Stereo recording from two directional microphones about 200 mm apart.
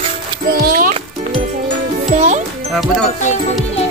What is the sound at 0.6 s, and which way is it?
Music, 45° right (ahead or behind).